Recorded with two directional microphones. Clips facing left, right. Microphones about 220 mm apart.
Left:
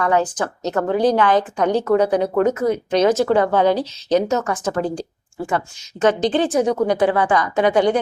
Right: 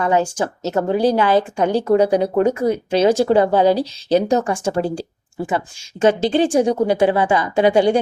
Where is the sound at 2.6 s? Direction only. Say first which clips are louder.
Right 1 dB; 35° right (ahead or behind).